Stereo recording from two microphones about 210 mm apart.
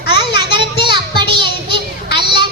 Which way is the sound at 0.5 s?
20° right (ahead or behind).